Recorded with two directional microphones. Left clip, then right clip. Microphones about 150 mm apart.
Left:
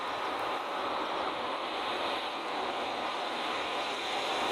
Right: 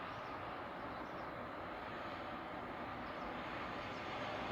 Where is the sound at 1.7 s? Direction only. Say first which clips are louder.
Left 13 dB; 35° left (ahead or behind).